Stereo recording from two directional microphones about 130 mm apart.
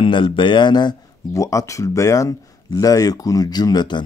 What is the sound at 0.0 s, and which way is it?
Speech, 40° left (ahead or behind).